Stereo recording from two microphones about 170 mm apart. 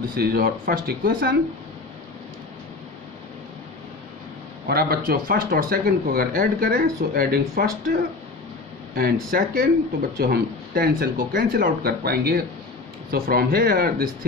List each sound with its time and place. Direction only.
0.1 s speech: 65° right (ahead or behind)
4.6 s speech: 65° right (ahead or behind)
9.3 s speech: 55° right (ahead or behind)